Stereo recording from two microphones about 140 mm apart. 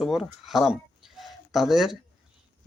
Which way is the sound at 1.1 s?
Centre (ahead or behind).